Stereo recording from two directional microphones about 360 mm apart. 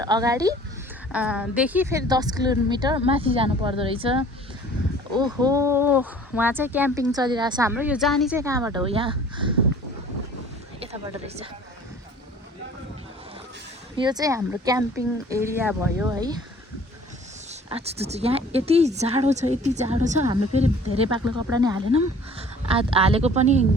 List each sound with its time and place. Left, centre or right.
0.0 s speech: centre
5.1 s speech: centre
13.9 s speech: centre
17.7 s speech: centre